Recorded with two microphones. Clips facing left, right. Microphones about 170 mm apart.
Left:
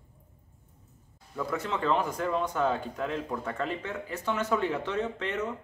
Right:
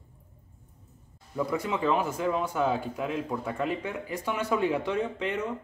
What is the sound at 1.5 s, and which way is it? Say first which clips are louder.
A man's voice: right 1 dB; 10° right (ahead or behind).